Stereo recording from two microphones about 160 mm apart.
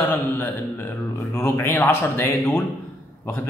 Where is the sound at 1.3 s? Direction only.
15° left (ahead or behind).